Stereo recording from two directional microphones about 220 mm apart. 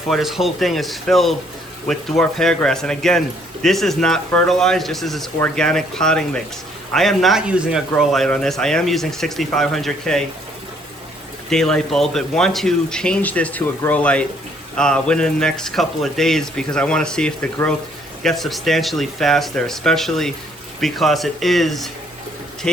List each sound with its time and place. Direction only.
0.1 s speech: centre (ahead or behind)
11.4 s speech: centre (ahead or behind)